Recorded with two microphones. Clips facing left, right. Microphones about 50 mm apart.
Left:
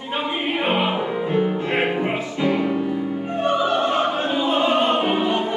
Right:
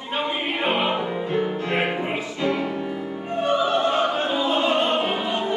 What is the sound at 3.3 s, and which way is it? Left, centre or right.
Opera, centre.